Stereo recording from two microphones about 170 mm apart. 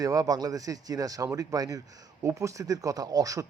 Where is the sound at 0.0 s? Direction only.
20° right (ahead or behind).